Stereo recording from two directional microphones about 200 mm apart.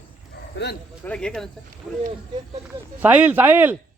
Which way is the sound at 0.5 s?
55° left (ahead or behind).